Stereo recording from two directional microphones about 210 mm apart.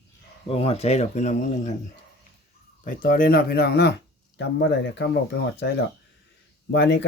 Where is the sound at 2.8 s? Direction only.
40° left (ahead or behind).